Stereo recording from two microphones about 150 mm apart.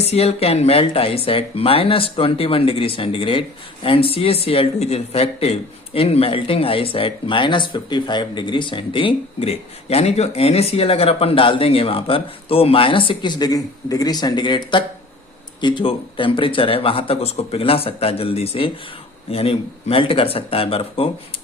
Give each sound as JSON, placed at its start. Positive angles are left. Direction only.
{"t": 0.0, "sound": "speech", "side_deg": 45}